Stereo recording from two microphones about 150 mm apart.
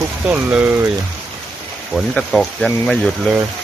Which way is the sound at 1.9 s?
5° left (ahead or behind).